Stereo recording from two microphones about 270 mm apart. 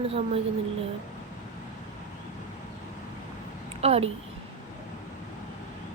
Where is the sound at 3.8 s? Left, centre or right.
Right.